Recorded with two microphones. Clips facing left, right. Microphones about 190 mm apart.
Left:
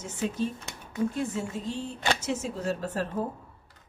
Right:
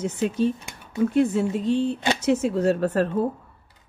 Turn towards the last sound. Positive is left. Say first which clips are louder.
# right 9 dB
turn(degrees=-65)  # may be behind; listen again after turning